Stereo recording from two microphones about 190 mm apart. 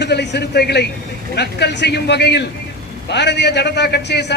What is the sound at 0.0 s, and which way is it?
A man's voice, 60° left (ahead or behind).